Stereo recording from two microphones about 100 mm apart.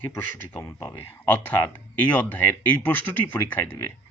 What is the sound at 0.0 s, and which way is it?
Speech, 20° left (ahead or behind).